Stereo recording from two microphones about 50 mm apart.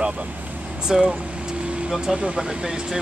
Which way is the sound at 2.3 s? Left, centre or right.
Centre.